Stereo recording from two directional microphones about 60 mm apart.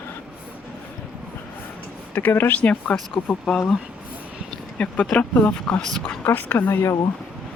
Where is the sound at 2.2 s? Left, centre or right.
Left.